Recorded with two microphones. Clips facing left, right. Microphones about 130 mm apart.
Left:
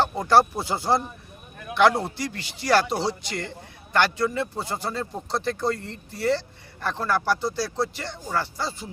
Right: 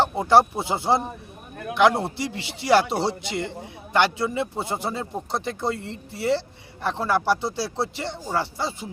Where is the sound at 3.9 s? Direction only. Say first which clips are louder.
Right 1 dB; 20° right (ahead or behind).